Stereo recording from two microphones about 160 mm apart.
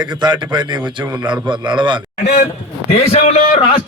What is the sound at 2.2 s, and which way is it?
A man's voice, 50° left (ahead or behind).